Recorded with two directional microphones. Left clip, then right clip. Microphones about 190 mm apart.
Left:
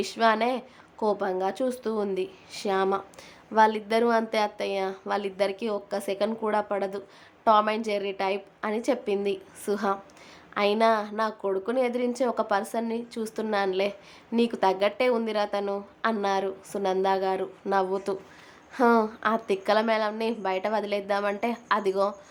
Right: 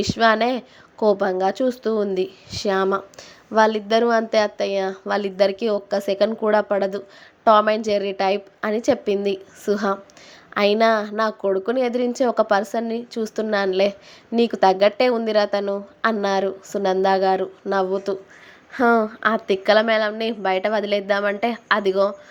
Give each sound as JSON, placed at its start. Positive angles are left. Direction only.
{"t": 0.0, "sound": "a woman's voice", "side_deg": -20}